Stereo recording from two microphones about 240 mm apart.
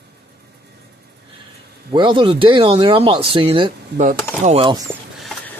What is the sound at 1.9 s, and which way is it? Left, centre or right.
Speech, centre.